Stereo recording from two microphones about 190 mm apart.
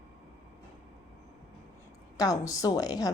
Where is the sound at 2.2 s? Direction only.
20° left (ahead or behind).